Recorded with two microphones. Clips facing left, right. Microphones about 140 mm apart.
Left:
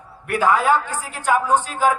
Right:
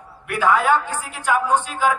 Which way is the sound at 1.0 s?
40° left (ahead or behind).